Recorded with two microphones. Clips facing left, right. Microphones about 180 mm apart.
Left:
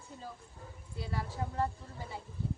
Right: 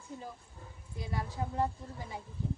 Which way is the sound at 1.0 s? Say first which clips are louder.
Right 1 dB; 15° right (ahead or behind).